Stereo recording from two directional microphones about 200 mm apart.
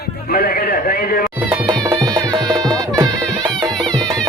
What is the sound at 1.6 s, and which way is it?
Music, 20° right (ahead or behind).